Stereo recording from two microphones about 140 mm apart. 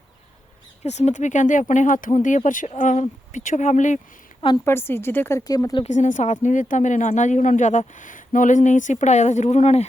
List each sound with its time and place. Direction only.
0.9 s speech: 55° left (ahead or behind)
4.6 s speech: 15° left (ahead or behind)
5.4 s speech: 25° left (ahead or behind)
5.8 s speech: 60° left (ahead or behind)